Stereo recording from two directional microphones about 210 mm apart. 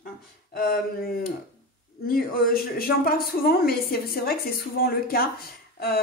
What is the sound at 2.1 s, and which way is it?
A woman's voice, 45° left (ahead or behind).